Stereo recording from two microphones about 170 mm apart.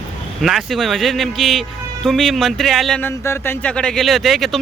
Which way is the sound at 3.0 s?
15° left (ahead or behind).